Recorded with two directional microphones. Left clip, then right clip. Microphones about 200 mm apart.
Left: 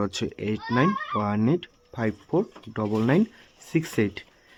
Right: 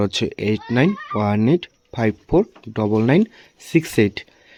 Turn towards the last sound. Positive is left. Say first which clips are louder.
# right 8 dB
turn(degrees=-25)  # may be behind; listen again after turning